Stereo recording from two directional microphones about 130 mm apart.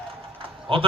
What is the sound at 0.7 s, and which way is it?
Speech, 45° right (ahead or behind).